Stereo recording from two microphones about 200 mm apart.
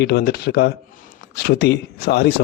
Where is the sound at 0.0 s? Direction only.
55° left (ahead or behind).